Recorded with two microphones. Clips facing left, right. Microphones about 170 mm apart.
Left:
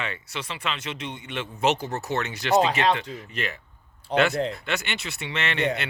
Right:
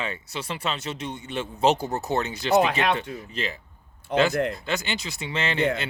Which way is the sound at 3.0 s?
20° right (ahead or behind).